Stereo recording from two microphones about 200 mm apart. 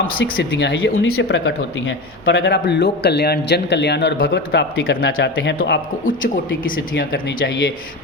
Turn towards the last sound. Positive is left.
turn(degrees=55)  # may be behind; listen again after turning